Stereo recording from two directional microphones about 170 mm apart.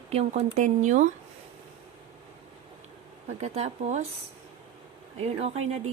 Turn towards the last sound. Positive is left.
turn(degrees=-35)  # may be behind; listen again after turning